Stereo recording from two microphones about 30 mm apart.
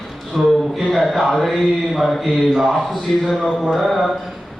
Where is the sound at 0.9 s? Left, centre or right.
Centre.